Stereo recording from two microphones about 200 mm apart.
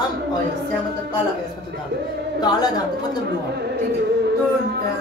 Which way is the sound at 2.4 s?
20° left (ahead or behind).